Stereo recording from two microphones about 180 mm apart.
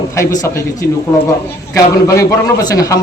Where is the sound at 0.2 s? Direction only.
15° left (ahead or behind).